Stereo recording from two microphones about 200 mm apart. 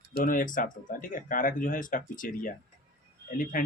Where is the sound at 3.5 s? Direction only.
40° left (ahead or behind).